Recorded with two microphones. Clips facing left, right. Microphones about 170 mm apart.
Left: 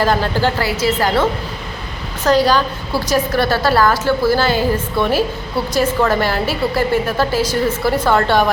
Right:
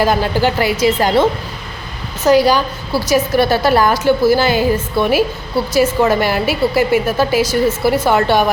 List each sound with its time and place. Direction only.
0.0 s a woman's voice: 10° right (ahead or behind)